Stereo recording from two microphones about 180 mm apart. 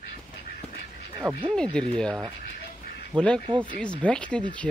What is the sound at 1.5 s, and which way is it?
Speech, 5° left (ahead or behind).